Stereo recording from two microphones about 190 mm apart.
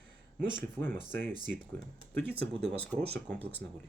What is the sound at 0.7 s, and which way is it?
Speech, 10° left (ahead or behind).